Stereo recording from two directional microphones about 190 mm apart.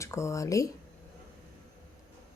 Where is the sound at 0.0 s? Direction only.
15° left (ahead or behind).